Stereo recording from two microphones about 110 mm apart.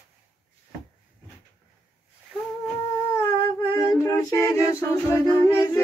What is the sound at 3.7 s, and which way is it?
A capella, 30° left (ahead or behind).